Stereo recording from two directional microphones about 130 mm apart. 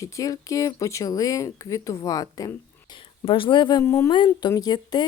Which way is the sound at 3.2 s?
40° left (ahead or behind).